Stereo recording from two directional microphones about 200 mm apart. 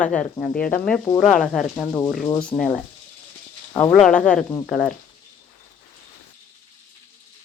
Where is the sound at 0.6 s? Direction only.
45° left (ahead or behind).